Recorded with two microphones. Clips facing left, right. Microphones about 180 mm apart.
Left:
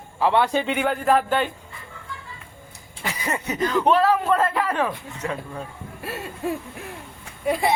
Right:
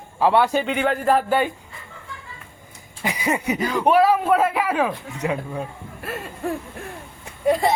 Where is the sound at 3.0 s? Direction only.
10° right (ahead or behind).